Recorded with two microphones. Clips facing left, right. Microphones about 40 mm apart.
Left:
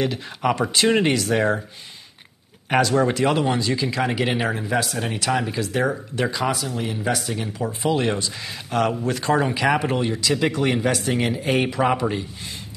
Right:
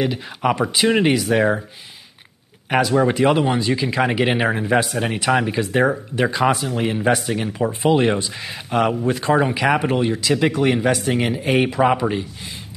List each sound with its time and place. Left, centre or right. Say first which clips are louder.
0.0 s speech: right 2 dB; centre
2.7 s speech: right 2 dB; centre